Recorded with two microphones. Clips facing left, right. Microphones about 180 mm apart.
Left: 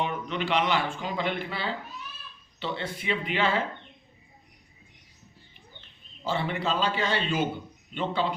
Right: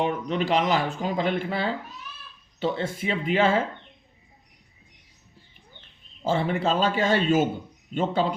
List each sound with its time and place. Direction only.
0.0 s speech: 40° right (ahead or behind)
6.2 s speech: 45° right (ahead or behind)